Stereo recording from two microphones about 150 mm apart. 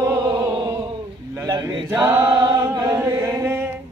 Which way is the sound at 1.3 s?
25° right (ahead or behind).